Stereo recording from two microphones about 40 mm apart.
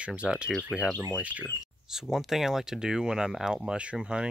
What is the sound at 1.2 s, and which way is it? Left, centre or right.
Speech, right.